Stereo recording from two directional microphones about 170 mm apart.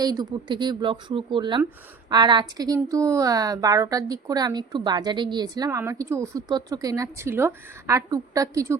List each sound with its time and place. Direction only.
0.0 s a woman's voice: 25° right (ahead or behind)